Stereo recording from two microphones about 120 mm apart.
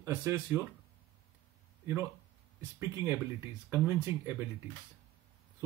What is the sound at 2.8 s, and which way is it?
Speech, 25° right (ahead or behind).